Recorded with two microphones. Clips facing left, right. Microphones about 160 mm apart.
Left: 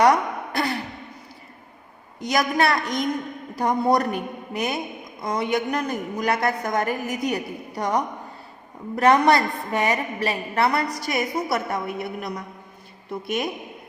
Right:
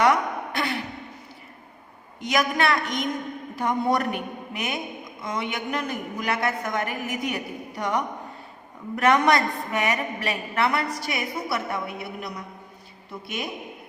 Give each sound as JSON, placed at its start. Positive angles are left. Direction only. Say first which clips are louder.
{"t": 0.0, "sound": "a sound", "louder": "left 3 dB", "side_deg": 40}
{"t": 2.2, "sound": "a woman's voice", "louder": "left 2 dB", "side_deg": 40}
{"t": 13.2, "sound": "a woman's voice", "louder": "left 6 dB", "side_deg": 50}